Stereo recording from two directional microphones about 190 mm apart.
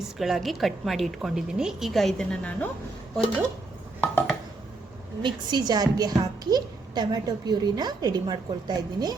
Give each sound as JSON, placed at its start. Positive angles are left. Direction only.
{"t": 0.0, "sound": "a woman's voice", "side_deg": 0}
{"t": 4.0, "sound": "a sound", "side_deg": 5}
{"t": 5.2, "sound": "a woman's voice", "side_deg": -20}